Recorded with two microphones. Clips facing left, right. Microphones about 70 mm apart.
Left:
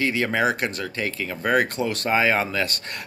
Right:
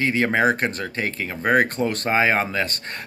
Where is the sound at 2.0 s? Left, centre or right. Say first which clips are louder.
Even; right.